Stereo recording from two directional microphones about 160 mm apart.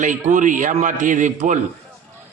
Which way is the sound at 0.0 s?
50° right (ahead or behind).